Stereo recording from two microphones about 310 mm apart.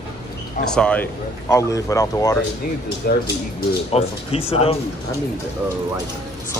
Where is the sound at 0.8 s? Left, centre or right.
Centre.